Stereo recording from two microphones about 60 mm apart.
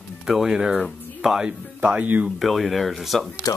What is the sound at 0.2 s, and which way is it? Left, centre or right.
Speech, centre.